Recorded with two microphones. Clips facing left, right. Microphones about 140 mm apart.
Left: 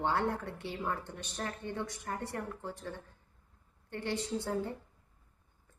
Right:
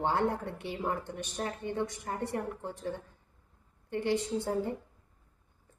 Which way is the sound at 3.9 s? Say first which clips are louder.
Right 5 dB; 15° right (ahead or behind).